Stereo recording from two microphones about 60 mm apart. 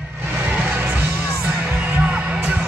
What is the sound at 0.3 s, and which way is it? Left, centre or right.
Music, right.